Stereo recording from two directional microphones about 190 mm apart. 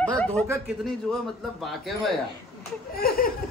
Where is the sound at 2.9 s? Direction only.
55° left (ahead or behind).